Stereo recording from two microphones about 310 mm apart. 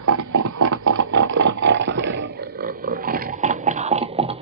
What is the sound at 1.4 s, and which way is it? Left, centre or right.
Roar, right.